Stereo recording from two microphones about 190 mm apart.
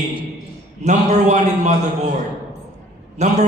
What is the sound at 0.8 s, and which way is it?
Speech, 40° right (ahead or behind).